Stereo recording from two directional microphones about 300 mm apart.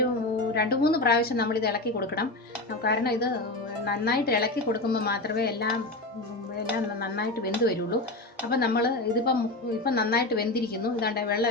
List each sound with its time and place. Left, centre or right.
0.5 s a woman's voice: left
7.0 s a woman's voice: left